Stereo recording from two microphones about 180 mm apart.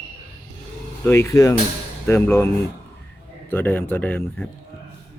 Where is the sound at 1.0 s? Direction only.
15° left (ahead or behind).